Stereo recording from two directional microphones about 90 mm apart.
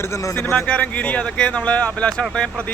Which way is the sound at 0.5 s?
15° left (ahead or behind).